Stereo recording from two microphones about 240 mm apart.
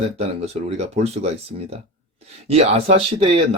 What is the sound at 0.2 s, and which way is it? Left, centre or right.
Speech, right.